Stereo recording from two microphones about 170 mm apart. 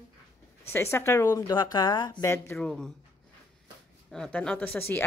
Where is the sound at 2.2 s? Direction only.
15° left (ahead or behind).